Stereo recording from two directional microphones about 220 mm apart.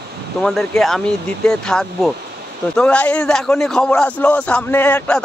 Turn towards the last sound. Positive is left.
turn(degrees=5)  # may be behind; listen again after turning